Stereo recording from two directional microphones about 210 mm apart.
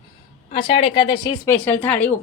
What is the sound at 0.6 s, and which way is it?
Speech, 25° left (ahead or behind).